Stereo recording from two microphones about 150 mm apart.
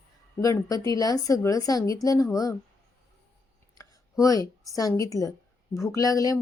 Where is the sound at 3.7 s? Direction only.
25° left (ahead or behind).